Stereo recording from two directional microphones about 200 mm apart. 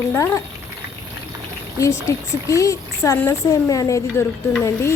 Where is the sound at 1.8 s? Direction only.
15° left (ahead or behind).